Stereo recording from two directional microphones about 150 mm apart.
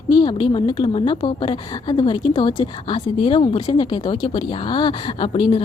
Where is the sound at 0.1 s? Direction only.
30° left (ahead or behind).